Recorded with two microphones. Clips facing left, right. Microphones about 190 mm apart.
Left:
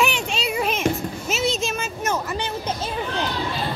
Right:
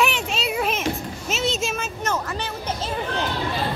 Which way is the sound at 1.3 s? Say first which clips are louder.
Left 1 dB; centre (ahead or behind).